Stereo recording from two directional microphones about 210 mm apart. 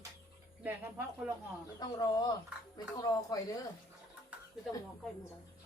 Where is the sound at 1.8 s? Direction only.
20° left (ahead or behind).